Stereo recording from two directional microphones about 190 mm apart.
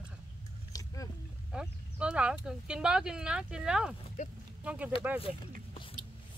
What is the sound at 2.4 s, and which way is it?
Speech, 5° right (ahead or behind).